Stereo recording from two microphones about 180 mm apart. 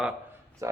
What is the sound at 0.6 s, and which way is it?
Speech, 15° right (ahead or behind).